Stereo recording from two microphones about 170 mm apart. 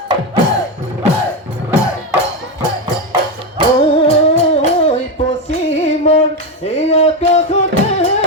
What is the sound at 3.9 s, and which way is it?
Music, 35° left (ahead or behind).